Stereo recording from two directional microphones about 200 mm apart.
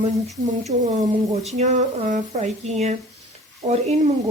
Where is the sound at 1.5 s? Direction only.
35° right (ahead or behind).